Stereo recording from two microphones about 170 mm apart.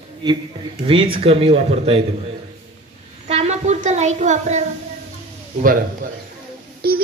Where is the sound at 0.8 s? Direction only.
30° right (ahead or behind).